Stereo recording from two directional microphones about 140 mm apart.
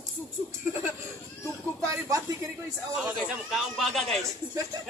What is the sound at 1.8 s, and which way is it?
Speech, 20° right (ahead or behind).